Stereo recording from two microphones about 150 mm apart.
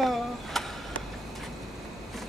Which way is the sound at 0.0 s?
Centre (ahead or behind).